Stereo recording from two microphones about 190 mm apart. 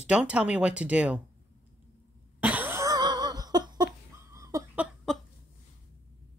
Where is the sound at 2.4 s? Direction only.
10° right (ahead or behind).